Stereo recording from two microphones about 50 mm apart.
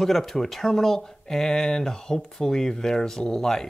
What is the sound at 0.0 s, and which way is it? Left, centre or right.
Speech, centre.